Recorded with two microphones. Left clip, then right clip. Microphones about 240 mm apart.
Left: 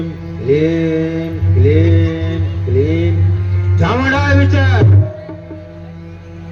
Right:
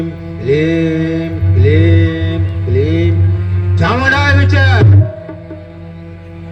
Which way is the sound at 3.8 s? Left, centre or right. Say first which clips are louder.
Right 3 dB; right.